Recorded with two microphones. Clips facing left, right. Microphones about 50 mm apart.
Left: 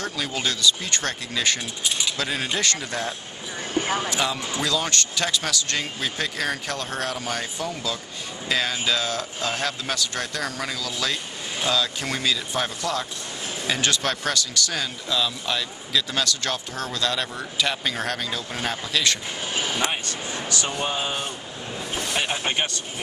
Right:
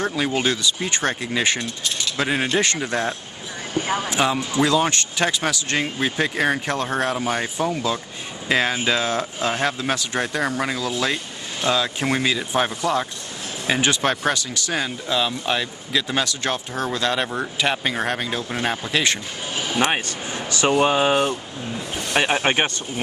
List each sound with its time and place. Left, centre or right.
0.0 s speech: right
1.6 s speech: centre
2.1 s speech: right
3.8 s speech: centre
4.1 s speech: right
19.8 s a sound: right
20.7 s speech: right